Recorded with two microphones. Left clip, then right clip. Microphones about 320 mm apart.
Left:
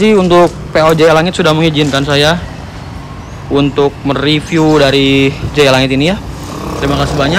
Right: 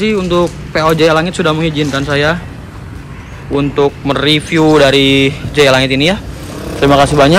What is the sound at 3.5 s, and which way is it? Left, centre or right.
Speech, centre.